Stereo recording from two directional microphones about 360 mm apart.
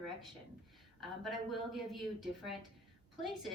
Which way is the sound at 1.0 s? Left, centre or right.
Centre.